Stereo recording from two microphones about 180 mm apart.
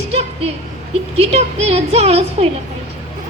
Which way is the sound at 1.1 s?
35° right (ahead or behind).